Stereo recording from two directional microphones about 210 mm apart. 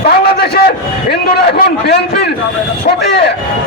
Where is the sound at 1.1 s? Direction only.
50° left (ahead or behind).